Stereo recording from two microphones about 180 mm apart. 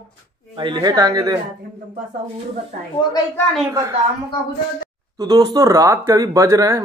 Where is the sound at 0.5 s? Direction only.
25° right (ahead or behind).